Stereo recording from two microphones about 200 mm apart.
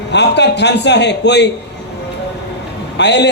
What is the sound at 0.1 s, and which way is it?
A woman's voice, 60° left (ahead or behind).